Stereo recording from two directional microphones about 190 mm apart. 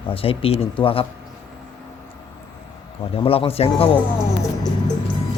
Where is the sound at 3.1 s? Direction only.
30° left (ahead or behind).